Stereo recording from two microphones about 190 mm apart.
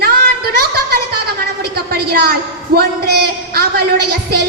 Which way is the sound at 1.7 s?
55° right (ahead or behind).